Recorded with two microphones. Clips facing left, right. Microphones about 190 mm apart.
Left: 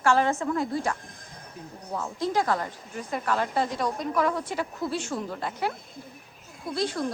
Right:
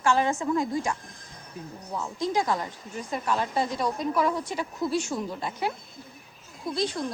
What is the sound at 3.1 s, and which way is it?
Speech, 60° left (ahead or behind).